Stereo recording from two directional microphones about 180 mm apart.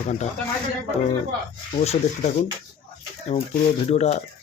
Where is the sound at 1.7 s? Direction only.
35° left (ahead or behind).